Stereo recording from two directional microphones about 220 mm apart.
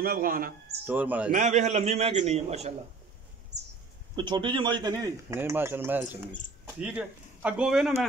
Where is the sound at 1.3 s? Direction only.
35° right (ahead or behind).